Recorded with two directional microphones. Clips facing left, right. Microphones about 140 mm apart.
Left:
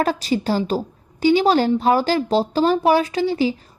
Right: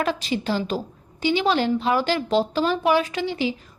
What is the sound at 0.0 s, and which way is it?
Speech, 40° left (ahead or behind).